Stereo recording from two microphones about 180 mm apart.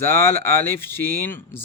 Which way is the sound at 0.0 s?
15° left (ahead or behind).